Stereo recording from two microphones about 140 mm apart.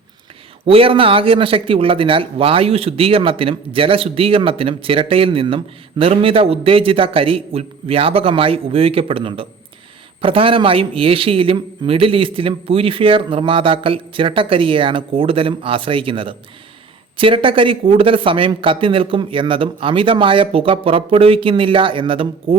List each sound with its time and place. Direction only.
0.6 s speech: 40° right (ahead or behind)